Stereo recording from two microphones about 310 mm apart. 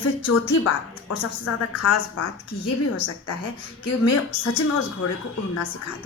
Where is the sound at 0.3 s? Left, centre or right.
Left.